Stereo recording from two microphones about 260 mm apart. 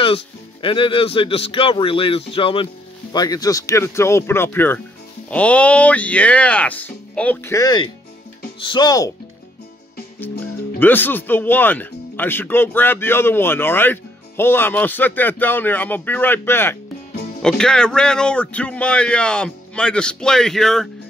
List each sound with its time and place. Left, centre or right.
0.0 s speech: centre
10.8 s speech: centre